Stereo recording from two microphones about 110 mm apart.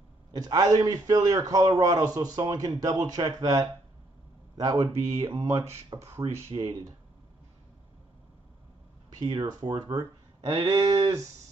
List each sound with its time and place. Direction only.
0.3 s a man's voice: 35° right (ahead or behind)
4.7 s speech: 60° right (ahead or behind)
5.9 s speech: 25° right (ahead or behind)
6.5 s speech: 45° right (ahead or behind)
9.2 s a man's voice: 40° right (ahead or behind)